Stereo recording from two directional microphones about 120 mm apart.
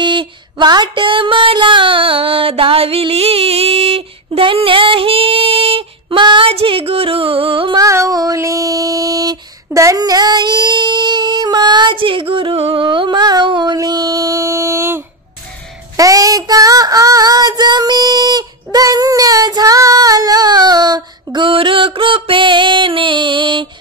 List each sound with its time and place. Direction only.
0.0 s female singing: 40° right (ahead or behind)
7.7 s a sound: 25° right (ahead or behind)
9.7 s singing: 25° right (ahead or behind)
16.0 s child singing: 30° right (ahead or behind)